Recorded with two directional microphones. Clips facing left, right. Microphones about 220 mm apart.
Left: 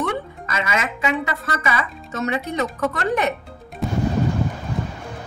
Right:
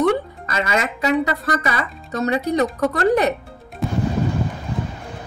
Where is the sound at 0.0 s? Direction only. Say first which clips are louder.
Right 7 dB; 35° right (ahead or behind).